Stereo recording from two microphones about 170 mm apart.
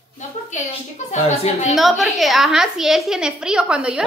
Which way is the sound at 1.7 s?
Centre (ahead or behind).